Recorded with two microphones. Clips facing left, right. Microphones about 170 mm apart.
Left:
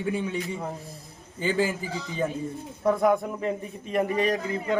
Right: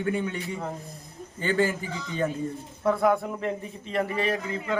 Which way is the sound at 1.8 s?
35° left (ahead or behind).